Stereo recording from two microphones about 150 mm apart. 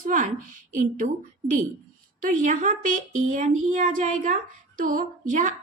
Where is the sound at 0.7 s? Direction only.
60° right (ahead or behind).